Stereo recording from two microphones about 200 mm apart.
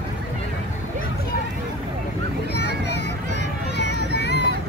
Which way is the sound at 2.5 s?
55° left (ahead or behind).